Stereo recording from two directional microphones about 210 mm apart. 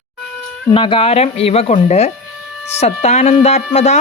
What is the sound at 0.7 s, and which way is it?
Speech, 25° left (ahead or behind).